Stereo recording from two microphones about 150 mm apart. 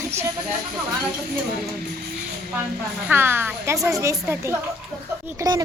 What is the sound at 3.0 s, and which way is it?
A woman's voice, 15° right (ahead or behind).